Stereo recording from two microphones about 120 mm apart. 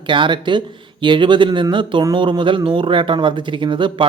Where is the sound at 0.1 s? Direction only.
40° right (ahead or behind).